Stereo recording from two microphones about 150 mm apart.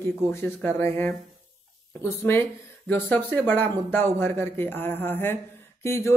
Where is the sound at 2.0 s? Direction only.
15° left (ahead or behind).